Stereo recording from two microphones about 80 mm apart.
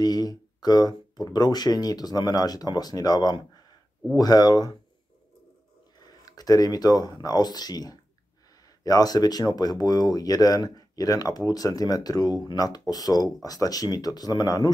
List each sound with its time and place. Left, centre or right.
0.0 s speech: left
6.2 s speech: left